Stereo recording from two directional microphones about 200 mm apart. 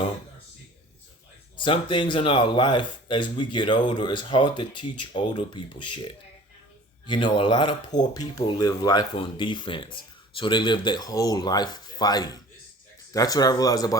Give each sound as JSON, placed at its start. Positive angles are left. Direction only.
{"t": 1.5, "sound": "speech", "side_deg": 25}